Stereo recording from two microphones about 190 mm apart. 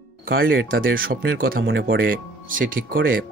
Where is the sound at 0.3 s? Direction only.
55° right (ahead or behind).